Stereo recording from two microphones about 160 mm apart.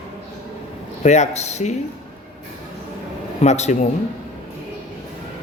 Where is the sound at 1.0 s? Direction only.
45° left (ahead or behind).